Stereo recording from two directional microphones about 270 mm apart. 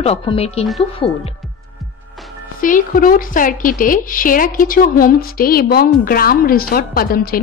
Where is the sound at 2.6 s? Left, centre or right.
Left.